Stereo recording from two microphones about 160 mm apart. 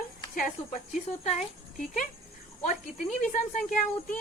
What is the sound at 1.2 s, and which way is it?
Speech, 45° left (ahead or behind).